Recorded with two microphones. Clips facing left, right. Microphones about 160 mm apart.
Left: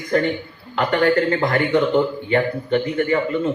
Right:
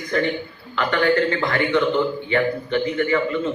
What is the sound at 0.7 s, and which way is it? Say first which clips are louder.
A man's voice: left 2 dB; 40° left (ahead or behind).